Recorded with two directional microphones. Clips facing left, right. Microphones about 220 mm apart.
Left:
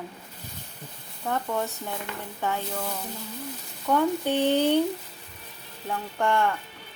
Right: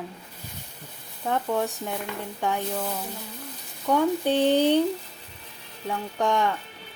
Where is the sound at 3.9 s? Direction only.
15° right (ahead or behind).